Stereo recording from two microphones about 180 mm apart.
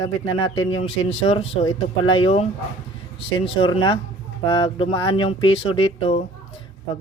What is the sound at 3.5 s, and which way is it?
Speech, 30° left (ahead or behind).